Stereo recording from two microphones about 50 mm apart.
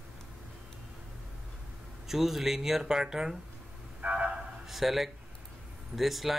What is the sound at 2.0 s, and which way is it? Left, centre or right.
Speech, centre.